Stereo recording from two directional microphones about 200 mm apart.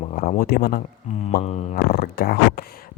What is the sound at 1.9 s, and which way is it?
Speech, 50° left (ahead or behind).